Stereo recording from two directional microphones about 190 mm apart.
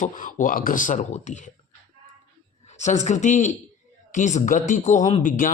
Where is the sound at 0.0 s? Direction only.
45° left (ahead or behind).